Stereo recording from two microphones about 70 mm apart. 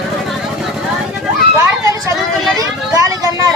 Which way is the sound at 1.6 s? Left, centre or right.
Right.